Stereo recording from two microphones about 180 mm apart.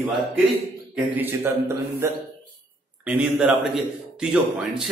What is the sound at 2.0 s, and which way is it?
A man's voice, 15° right (ahead or behind).